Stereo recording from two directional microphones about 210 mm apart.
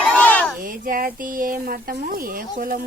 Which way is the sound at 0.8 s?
40° right (ahead or behind).